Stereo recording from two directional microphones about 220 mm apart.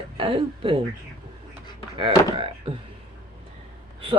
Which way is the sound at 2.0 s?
25° right (ahead or behind).